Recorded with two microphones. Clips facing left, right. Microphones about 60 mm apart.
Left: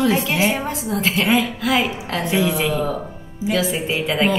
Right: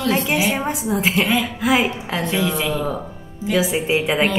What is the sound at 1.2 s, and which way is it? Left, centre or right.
Speech, centre.